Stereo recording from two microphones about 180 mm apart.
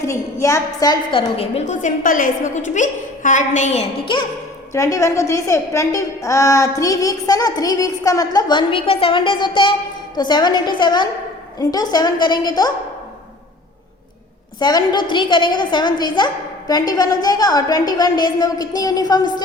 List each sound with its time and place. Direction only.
0.0 s a woman's voice: 15° left (ahead or behind); by 4.2 s 30° left (ahead or behind)
4.7 s a woman's voice: 20° left (ahead or behind)
14.6 s a woman's voice: 25° left (ahead or behind)